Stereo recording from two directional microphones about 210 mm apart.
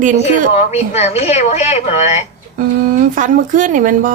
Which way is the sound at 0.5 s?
30° left (ahead or behind).